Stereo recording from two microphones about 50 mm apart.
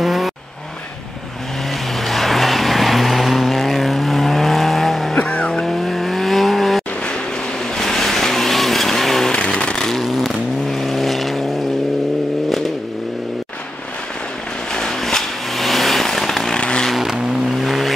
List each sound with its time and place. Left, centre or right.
0.0 s vehicle: centre
2.0 s vehicle: centre
5.1 s vehicle: left
5.6 s vehicle: centre
9.3 s a sound: left
9.8 s vehicle: centre
14.7 s a sound: centre
16.5 s vehicle: centre
16.9 s vehicle: centre